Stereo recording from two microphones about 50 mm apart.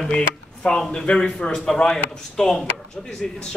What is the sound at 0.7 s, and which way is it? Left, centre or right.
A man's voice, centre.